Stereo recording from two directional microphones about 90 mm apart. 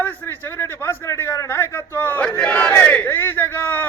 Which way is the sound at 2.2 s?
15° left (ahead or behind).